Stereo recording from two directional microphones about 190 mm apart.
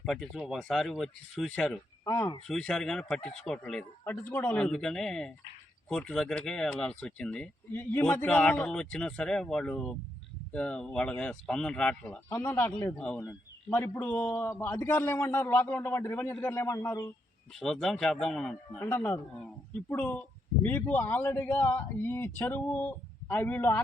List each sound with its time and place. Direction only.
0.0 s speech: centre (ahead or behind)
2.0 s a man's voice: 15° left (ahead or behind)
2.5 s a man's voice: 5° left (ahead or behind)
17.5 s a man's voice: centre (ahead or behind)